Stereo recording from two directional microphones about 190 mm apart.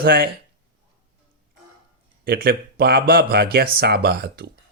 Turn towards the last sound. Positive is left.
turn(degrees=-55)  # may be behind; listen again after turning